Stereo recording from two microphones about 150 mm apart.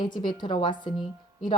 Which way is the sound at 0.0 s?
30° left (ahead or behind).